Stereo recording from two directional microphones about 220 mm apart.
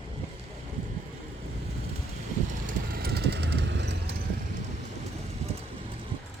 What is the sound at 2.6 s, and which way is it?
Clip-clop, 45° right (ahead or behind).